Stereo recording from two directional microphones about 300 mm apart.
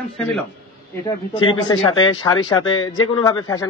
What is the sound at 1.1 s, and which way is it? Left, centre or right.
A man's voice, centre.